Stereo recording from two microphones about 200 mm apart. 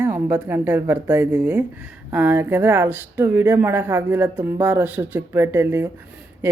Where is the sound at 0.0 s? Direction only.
10° right (ahead or behind).